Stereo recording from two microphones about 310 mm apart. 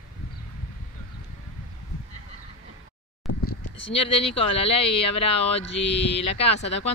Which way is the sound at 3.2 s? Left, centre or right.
Centre.